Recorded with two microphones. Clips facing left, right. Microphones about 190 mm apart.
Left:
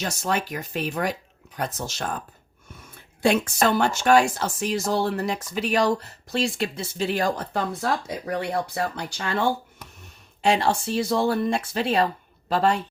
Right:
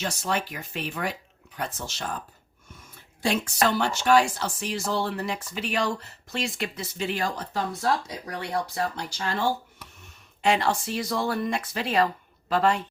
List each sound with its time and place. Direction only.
0.0 s speech: 45° left (ahead or behind)
3.2 s speech: 60° left (ahead or behind)
10.4 s speech: 30° left (ahead or behind)